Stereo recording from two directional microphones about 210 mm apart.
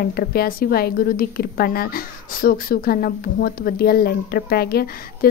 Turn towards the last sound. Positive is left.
turn(degrees=45)  # may be behind; listen again after turning